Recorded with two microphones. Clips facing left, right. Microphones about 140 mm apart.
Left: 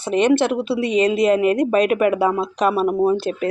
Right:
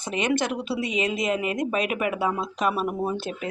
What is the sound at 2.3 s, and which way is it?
Speech, 30° left (ahead or behind).